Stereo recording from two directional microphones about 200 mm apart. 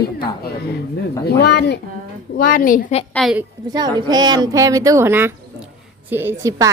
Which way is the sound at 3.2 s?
Centre (ahead or behind).